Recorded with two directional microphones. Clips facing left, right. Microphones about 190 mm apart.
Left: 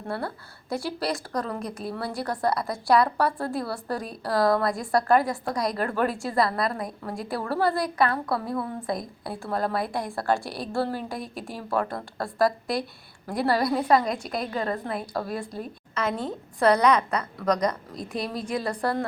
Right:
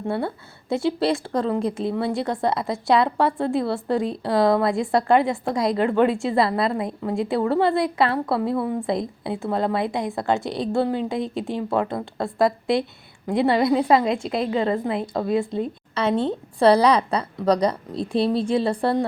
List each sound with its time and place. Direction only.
0.1 s a woman's voice: 25° right (ahead or behind)